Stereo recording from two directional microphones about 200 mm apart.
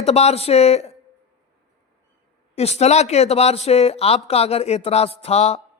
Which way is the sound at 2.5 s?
30° left (ahead or behind).